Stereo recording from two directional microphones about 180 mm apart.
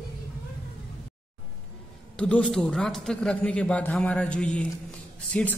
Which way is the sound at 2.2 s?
5° left (ahead or behind).